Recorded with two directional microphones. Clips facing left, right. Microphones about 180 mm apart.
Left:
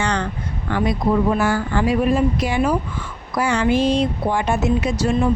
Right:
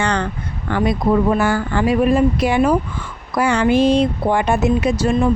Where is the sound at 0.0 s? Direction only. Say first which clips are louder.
Right 2 dB; 60° right (ahead or behind).